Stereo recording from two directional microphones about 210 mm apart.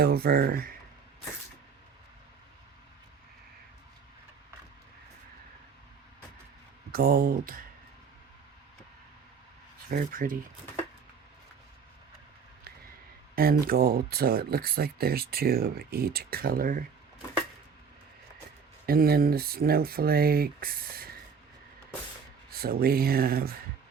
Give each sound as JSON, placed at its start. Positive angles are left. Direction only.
{"t": 0.0, "sound": "speech", "side_deg": -45}
{"t": 6.9, "sound": "speech", "side_deg": -45}
{"t": 9.9, "sound": "speech", "side_deg": -40}
{"t": 13.3, "sound": "speech", "side_deg": -45}
{"t": 18.9, "sound": "speech", "side_deg": -45}
{"t": 22.5, "sound": "speech", "side_deg": -45}